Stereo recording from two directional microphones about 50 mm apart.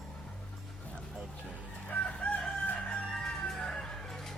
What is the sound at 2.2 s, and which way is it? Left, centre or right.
Crowing, left.